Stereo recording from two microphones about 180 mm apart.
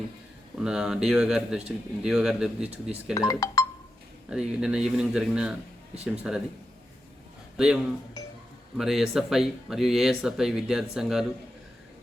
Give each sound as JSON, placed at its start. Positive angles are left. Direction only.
{"t": 0.6, "sound": "speech", "side_deg": -5}
{"t": 3.2, "sound": "speech", "side_deg": 20}
{"t": 4.3, "sound": "speech", "side_deg": -5}
{"t": 7.5, "sound": "speech", "side_deg": -5}